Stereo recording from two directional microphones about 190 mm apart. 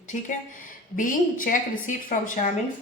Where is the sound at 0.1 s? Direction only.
45° left (ahead or behind).